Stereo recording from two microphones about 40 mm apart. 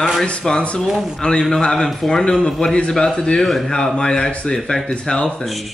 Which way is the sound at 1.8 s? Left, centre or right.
Centre.